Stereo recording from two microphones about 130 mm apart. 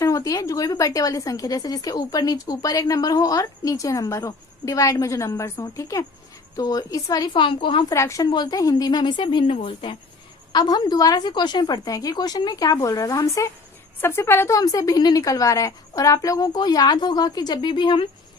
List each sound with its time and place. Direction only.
0.0 s a woman's voice: 25° left (ahead or behind)
7.9 s a woman's voice: 25° left (ahead or behind)